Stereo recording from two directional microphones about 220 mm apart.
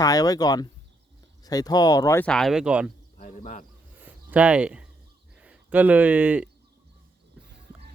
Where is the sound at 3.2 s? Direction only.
35° left (ahead or behind).